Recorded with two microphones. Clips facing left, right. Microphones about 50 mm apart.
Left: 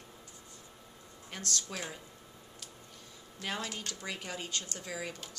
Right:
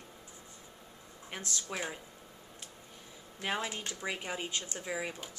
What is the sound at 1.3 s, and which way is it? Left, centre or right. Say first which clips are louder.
Speech: even; centre.